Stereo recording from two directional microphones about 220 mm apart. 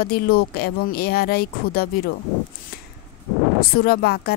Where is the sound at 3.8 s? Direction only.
45° left (ahead or behind).